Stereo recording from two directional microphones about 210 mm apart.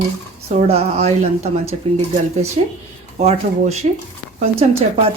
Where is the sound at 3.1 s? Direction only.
30° right (ahead or behind).